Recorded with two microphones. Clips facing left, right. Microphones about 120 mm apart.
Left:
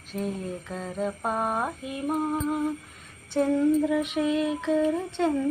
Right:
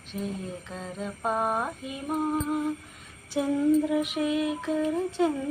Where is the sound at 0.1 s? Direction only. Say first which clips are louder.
Left 3 dB; centre (ahead or behind).